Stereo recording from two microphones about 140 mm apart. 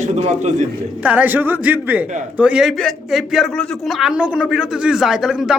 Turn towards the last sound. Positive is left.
turn(degrees=-5)  # may be behind; listen again after turning